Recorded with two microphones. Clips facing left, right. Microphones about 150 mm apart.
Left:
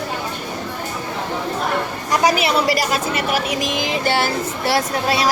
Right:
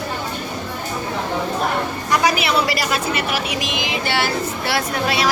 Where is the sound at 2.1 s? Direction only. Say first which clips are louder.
Left 1 dB; 40° left (ahead or behind).